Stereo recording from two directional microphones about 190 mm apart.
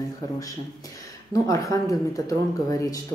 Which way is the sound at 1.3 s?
15° left (ahead or behind).